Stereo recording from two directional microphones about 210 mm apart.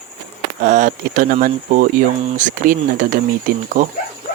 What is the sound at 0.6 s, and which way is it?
Speech, 35° right (ahead or behind).